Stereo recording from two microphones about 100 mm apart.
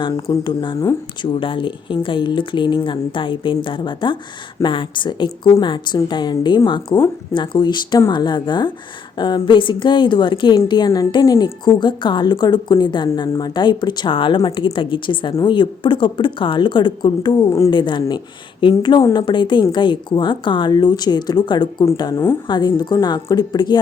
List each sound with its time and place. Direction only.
0.0 s a woman's voice: 50° left (ahead or behind)